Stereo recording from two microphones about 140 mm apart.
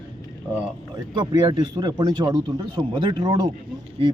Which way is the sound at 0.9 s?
25° right (ahead or behind).